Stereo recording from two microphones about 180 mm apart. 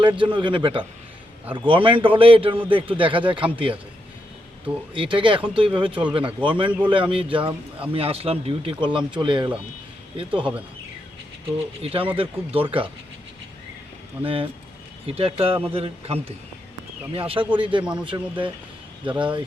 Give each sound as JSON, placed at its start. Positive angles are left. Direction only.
{"t": 0.0, "sound": "speech", "side_deg": -25}
{"t": 4.9, "sound": "speech", "side_deg": -30}
{"t": 11.8, "sound": "speech", "side_deg": -30}
{"t": 14.3, "sound": "a man's voice", "side_deg": -30}